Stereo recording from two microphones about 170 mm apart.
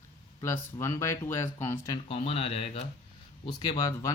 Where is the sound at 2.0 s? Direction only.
35° left (ahead or behind).